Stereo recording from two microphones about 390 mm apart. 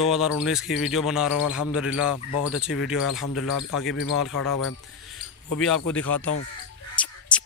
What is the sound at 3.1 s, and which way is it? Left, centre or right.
Speech, left.